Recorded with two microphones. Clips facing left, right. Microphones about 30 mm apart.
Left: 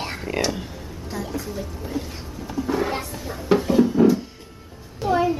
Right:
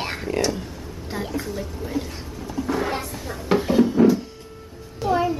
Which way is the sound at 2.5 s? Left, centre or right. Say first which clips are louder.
Left 1 dB; centre.